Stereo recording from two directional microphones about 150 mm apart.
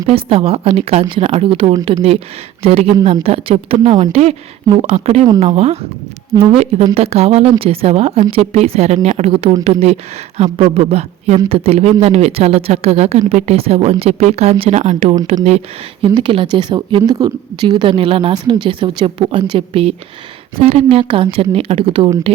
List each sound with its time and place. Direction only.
0.1 s a woman's voice: 40° right (ahead or behind)
16.0 s a woman's voice: 35° right (ahead or behind)